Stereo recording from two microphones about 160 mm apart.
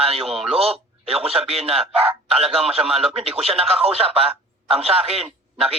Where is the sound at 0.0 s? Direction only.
40° right (ahead or behind).